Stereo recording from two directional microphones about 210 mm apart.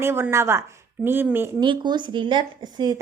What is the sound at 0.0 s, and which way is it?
A woman's voice, 10° right (ahead or behind).